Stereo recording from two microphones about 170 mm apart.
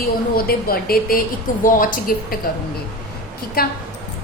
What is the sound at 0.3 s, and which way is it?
A woman's voice, 60° left (ahead or behind).